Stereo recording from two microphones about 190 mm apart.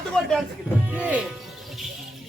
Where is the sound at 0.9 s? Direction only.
5° right (ahead or behind).